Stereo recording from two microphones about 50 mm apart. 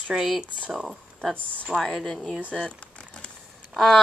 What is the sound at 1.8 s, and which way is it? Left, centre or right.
Speech, centre.